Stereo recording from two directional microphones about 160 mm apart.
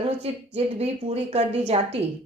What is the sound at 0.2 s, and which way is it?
Speech, 40° right (ahead or behind).